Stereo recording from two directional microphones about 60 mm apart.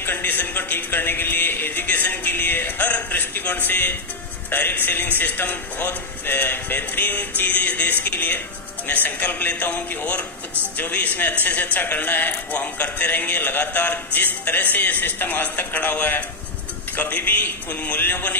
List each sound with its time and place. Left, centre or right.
0.0 s a man's voice: left